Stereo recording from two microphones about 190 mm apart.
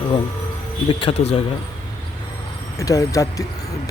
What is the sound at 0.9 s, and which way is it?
Speech, 30° left (ahead or behind).